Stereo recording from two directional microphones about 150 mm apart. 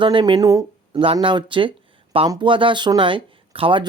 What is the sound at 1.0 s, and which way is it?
Speech, 35° right (ahead or behind).